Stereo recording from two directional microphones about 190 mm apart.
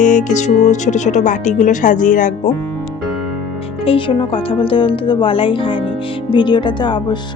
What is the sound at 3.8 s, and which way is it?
A woman's voice, 30° left (ahead or behind).